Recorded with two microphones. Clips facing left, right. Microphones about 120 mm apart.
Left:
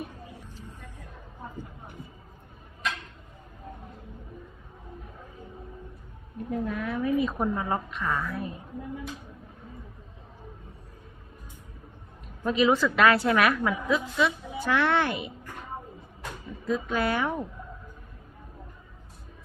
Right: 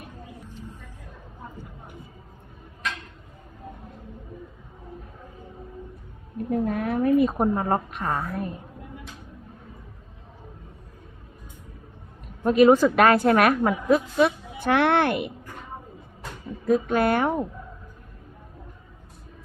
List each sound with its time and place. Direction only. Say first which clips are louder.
6.5 s a woman's voice: right 5 dB; 50° right (ahead or behind)
12.5 s a woman's voice: right 7 dB; 50° right (ahead or behind)
16.6 s a woman's voice: right 6 dB; 55° right (ahead or behind)